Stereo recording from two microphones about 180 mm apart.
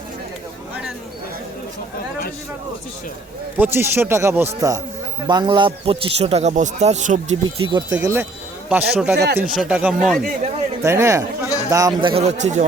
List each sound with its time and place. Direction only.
3.6 s a man's voice: 10° right (ahead or behind); by 7.3 s 40° right (ahead or behind)
7.4 s speech: 25° right (ahead or behind)
7.9 s speech: 15° right (ahead or behind)
9.1 s speech: 65° right (ahead or behind)
9.6 s speech: 5° right (ahead or behind)
10.8 s a man's voice: 15° right (ahead or behind); by 12.6 s 40° right (ahead or behind)